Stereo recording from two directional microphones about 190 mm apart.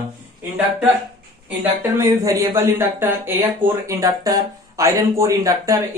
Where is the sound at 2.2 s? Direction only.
15° right (ahead or behind).